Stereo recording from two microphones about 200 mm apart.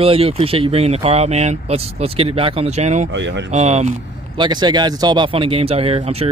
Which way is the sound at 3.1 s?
65° right (ahead or behind).